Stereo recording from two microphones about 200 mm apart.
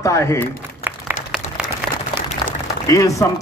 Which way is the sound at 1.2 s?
40° left (ahead or behind).